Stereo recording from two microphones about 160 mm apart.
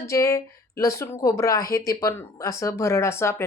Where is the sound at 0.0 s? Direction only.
20° left (ahead or behind).